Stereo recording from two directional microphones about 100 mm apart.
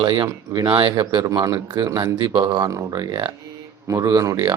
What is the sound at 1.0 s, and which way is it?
Speech, 40° right (ahead or behind).